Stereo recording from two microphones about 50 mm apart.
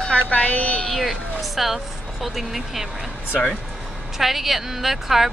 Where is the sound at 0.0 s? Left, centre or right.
Centre.